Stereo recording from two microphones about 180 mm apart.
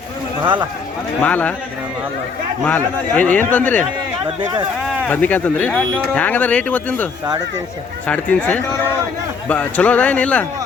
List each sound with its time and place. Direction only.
1.2 s speech: 10° left (ahead or behind)
2.6 s speech: 10° left (ahead or behind)
4.4 s speech: 25° right (ahead or behind)
5.0 s speech: 10° left (ahead or behind)